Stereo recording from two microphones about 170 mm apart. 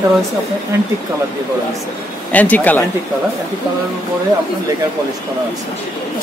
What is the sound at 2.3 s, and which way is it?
Speech, 10° left (ahead or behind).